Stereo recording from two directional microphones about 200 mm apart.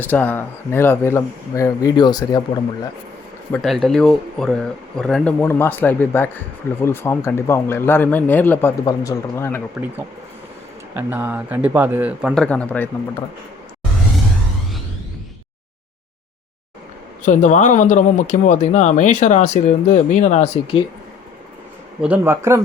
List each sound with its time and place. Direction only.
0.0 s speech: 10° left (ahead or behind)
3.5 s speech: centre (ahead or behind)
9.8 s a man's voice: 10° right (ahead or behind)
10.9 s a man's voice: 10° right (ahead or behind)
12.3 s speech: 5° left (ahead or behind)
17.2 s speech: 40° left (ahead or behind)
22.0 s a man's voice: 10° right (ahead or behind)